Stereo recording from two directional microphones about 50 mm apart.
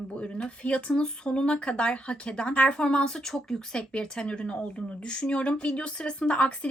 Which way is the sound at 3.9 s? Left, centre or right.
Left.